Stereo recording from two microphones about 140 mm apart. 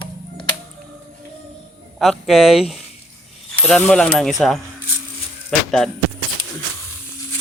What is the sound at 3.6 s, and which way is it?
Mechanisms, 10° left (ahead or behind).